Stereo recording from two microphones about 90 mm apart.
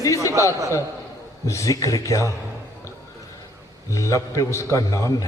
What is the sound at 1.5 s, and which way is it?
Speech, 35° left (ahead or behind).